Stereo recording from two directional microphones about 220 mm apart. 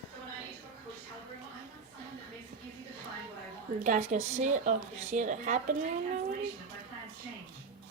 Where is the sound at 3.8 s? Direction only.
35° right (ahead or behind).